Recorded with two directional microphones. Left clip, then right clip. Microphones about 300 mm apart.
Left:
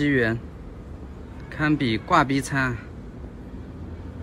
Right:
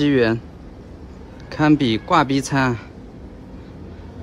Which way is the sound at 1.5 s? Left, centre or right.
Centre.